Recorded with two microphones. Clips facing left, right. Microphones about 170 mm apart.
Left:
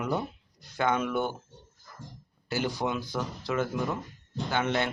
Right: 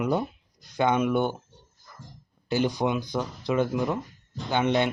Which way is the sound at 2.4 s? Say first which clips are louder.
Right 5 dB; 20° right (ahead or behind).